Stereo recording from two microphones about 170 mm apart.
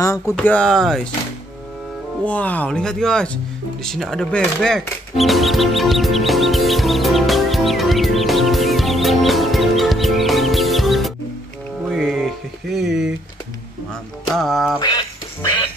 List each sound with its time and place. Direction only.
0.4 s speech: 5° left (ahead or behind)
2.2 s speech: 10° left (ahead or behind)
11.9 s music: centre (ahead or behind)
14.3 s speech: centre (ahead or behind)
14.8 s a sound: 25° left (ahead or behind)